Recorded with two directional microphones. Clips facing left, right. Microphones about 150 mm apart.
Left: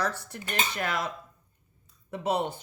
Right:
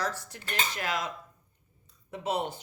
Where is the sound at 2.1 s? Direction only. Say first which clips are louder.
Left 3 dB; 60° left (ahead or behind).